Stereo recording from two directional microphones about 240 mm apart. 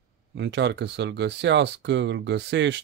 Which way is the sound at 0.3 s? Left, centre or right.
Right.